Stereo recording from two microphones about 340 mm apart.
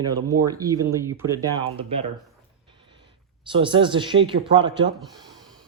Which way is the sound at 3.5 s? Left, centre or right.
Centre.